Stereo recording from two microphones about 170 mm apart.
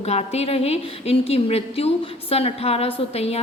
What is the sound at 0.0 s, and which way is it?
A woman's voice, 40° left (ahead or behind).